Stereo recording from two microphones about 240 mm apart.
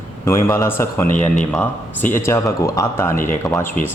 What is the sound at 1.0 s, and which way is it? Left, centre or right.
Speech, left.